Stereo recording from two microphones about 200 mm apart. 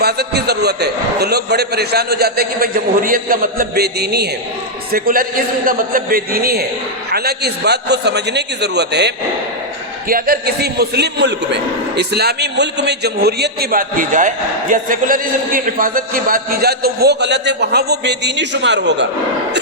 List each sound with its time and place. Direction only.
0.0 s a man's voice: 55° right (ahead or behind)
10.1 s a man's voice: 45° right (ahead or behind)